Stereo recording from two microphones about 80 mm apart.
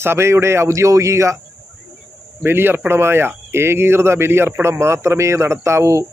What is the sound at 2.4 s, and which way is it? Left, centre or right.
Speech, right.